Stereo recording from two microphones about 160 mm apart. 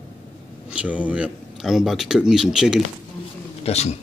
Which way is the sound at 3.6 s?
40° left (ahead or behind).